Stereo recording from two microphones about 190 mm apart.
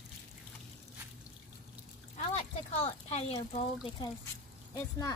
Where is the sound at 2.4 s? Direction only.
35° left (ahead or behind).